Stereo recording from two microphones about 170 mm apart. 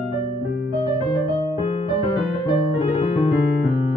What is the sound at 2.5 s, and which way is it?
Music, 30° left (ahead or behind).